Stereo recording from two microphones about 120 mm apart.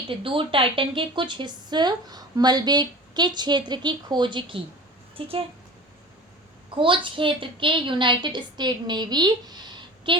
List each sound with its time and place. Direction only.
0.1 s a woman's voice: 50° right (ahead or behind)
6.7 s a woman's voice: 45° right (ahead or behind)